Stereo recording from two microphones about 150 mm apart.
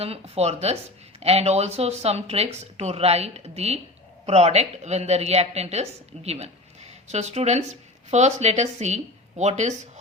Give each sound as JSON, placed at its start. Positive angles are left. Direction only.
{"t": 0.0, "sound": "a woman's voice", "side_deg": -45}